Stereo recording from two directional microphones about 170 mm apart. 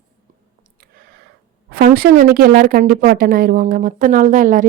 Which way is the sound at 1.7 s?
60° right (ahead or behind).